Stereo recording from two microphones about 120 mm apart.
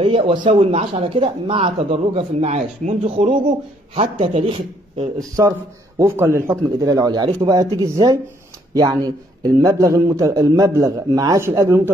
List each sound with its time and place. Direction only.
0.0 s speech: 45° right (ahead or behind)
0.7 s speech: 55° right (ahead or behind); by 3.0 s 80° right
3.2 s speech: 70° right (ahead or behind)
5.9 s a man's voice: 20° right (ahead or behind)